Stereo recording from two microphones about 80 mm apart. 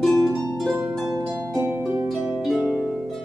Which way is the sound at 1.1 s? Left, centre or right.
Right.